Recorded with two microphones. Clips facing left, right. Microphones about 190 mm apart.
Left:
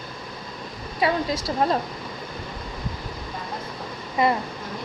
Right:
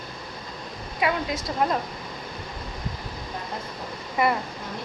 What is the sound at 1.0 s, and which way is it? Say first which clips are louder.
Speech: left 2 dB; 30° left (ahead or behind).